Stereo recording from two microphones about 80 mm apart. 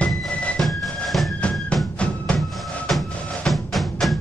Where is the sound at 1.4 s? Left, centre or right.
Centre.